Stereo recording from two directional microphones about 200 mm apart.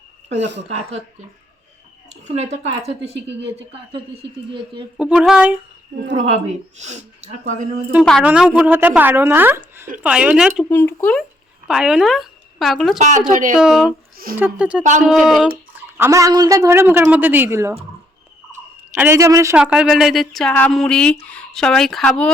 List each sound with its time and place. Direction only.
0.3 s speech: 60° right (ahead or behind)
0.7 s speech: 30° right (ahead or behind)
2.0 s speech: 35° right (ahead or behind)
3.2 s speech: 60° right (ahead or behind)
4.9 s speech: 5° right (ahead or behind)
6.7 s speech: 35° right (ahead or behind)
8.0 s a woman's voice: centre (ahead or behind)
10.7 s speech: 10° left (ahead or behind)
11.7 s speech: 5° right (ahead or behind)
13.0 s speech: 35° right (ahead or behind)
13.6 s a woman's voice: centre (ahead or behind)
15.7 s a woman's voice: 15° right (ahead or behind)
18.5 s a sound: 10° right (ahead or behind)
19.5 s speech: 5° right (ahead or behind)